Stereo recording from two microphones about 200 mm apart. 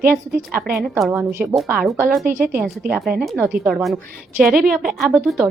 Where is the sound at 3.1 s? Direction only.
Centre (ahead or behind).